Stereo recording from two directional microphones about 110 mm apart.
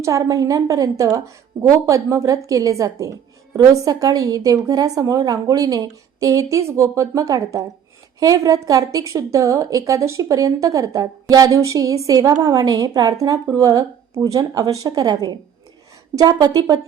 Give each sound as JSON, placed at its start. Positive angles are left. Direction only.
{"t": 0.0, "sound": "a woman's voice", "side_deg": -30}